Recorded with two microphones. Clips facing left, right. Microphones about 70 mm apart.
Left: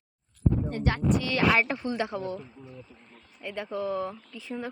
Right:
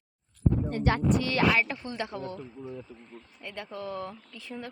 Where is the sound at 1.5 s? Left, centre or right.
Left.